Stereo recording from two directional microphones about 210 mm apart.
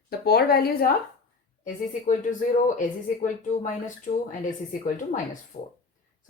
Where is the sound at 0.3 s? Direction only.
50° left (ahead or behind).